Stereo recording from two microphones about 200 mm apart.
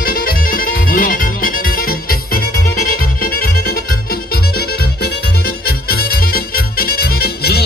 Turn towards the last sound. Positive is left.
turn(degrees=50)  # may be behind; listen again after turning